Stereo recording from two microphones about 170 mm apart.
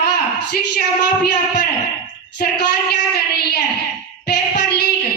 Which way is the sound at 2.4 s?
60° left (ahead or behind).